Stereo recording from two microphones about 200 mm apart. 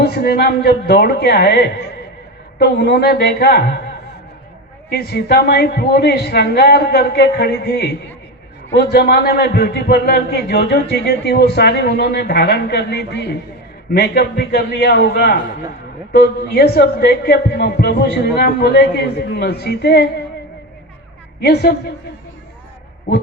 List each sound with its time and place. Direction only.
0.0 s a man's voice: 55° left (ahead or behind)
4.9 s a man's voice: 55° left (ahead or behind)
21.4 s speech: 55° left (ahead or behind)